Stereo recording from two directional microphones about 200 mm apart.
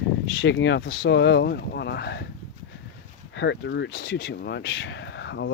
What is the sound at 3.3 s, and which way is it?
Speech, 60° left (ahead or behind).